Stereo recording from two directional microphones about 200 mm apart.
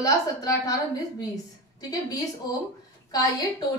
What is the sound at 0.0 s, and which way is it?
A woman's voice, 15° left (ahead or behind).